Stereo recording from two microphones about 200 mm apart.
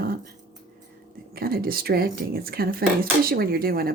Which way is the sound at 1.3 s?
50° right (ahead or behind).